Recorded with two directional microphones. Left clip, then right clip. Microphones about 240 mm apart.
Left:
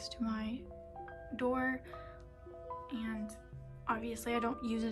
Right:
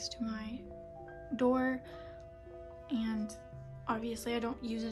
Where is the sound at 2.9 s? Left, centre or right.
Centre.